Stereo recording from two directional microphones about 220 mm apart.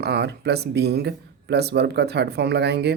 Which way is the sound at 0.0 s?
50° right (ahead or behind).